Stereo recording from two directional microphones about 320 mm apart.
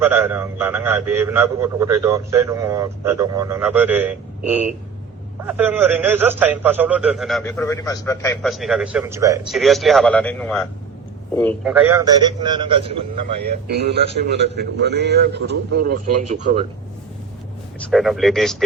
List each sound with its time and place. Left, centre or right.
0.0 s a man's voice: centre
11.8 s a man's voice: centre
13.7 s a man's voice: right
17.9 s a man's voice: centre